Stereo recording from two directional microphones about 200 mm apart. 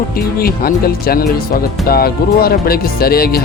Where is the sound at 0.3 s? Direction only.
50° left (ahead or behind).